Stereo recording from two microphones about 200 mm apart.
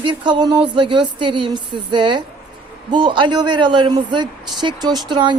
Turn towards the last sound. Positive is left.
turn(degrees=-25)  # may be behind; listen again after turning